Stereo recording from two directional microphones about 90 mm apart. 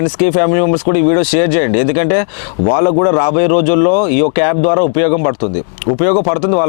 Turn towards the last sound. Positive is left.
turn(degrees=20)  # may be behind; listen again after turning